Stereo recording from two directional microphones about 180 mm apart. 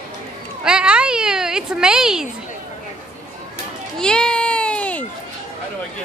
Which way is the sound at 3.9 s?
5° left (ahead or behind).